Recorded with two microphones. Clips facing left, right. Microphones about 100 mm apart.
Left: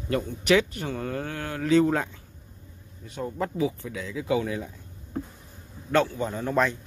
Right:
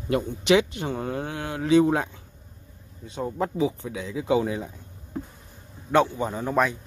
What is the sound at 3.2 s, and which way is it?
Speech, 20° right (ahead or behind).